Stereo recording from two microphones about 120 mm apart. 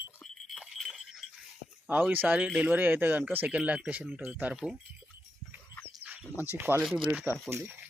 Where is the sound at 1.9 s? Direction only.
15° right (ahead or behind).